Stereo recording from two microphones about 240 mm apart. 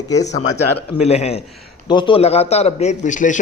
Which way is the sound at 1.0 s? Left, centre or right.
Left.